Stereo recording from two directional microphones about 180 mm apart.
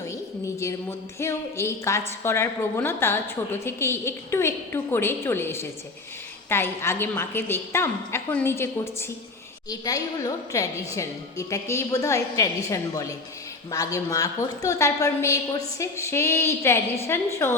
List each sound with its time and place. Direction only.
0.1 s a woman's voice: 15° left (ahead or behind)